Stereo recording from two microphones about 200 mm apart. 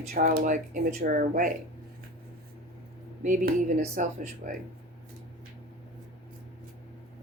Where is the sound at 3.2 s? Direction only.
40° right (ahead or behind).